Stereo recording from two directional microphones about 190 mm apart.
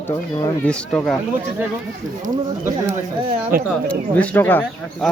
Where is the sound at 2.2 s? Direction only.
15° right (ahead or behind).